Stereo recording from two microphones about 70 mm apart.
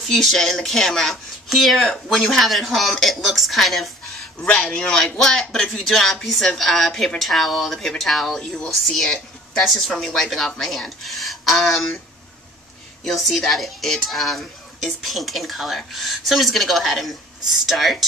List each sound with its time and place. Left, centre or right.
0.0 s speech: centre
4.1 s a sound: centre
4.5 s speech: centre
13.0 s speech: centre